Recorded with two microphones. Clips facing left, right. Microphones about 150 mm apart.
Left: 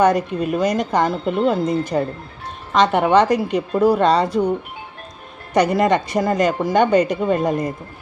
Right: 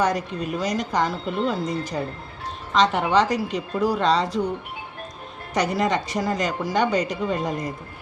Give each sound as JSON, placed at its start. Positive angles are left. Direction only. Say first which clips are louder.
{"t": 0.0, "sound": "a woman's voice", "louder": "left 7 dB", "side_deg": 55}
{"t": 5.5, "sound": "a woman's voice", "louder": "left 6 dB", "side_deg": 55}